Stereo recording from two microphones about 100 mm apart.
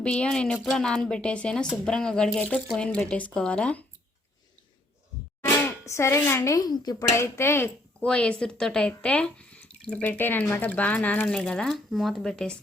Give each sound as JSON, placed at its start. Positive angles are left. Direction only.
{"t": 0.0, "sound": "speech", "side_deg": 10}
{"t": 5.5, "sound": "hands", "side_deg": 20}
{"t": 5.8, "sound": "a woman's voice", "side_deg": 30}
{"t": 7.2, "sound": "a woman's voice", "side_deg": 25}
{"t": 8.0, "sound": "speech", "side_deg": 10}